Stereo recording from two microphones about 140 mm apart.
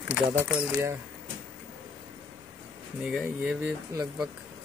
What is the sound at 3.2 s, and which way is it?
Speech, 10° right (ahead or behind).